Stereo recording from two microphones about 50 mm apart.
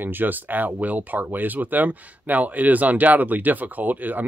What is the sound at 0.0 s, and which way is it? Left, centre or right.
Speech, right.